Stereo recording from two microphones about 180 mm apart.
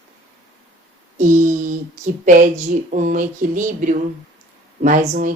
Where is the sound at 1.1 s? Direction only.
45° right (ahead or behind).